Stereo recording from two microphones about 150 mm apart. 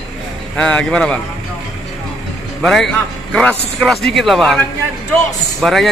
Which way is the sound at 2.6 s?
5° left (ahead or behind).